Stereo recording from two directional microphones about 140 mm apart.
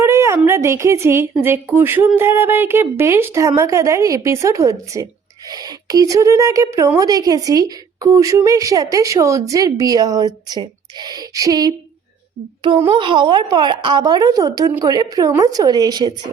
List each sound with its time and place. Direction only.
0.0 s a sound: 20° right (ahead or behind)
0.4 s music: 20° right (ahead or behind)
12.9 s music: 35° right (ahead or behind)